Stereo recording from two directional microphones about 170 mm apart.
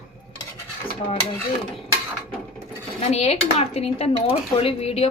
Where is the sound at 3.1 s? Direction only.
40° left (ahead or behind).